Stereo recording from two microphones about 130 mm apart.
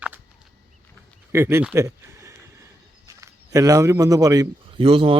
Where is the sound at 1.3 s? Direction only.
20° right (ahead or behind).